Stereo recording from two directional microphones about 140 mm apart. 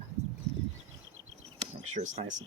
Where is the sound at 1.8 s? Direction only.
55° right (ahead or behind).